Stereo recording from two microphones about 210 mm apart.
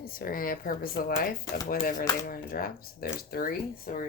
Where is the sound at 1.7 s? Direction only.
40° left (ahead or behind).